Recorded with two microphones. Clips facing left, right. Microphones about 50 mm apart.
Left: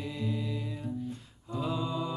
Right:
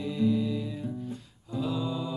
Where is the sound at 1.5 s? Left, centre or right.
Left.